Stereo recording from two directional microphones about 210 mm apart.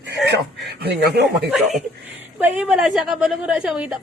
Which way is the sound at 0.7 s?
50° right (ahead or behind).